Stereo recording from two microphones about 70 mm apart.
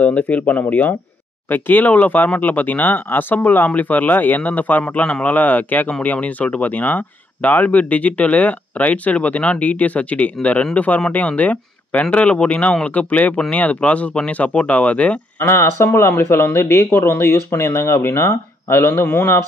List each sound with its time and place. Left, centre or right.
0.0 s speech: left
15.3 s speech: left